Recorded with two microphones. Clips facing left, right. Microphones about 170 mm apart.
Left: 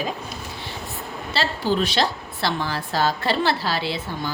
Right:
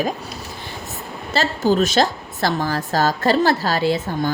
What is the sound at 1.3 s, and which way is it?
A woman's voice, 45° right (ahead or behind).